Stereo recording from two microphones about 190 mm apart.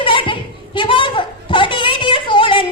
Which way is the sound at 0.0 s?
25° left (ahead or behind).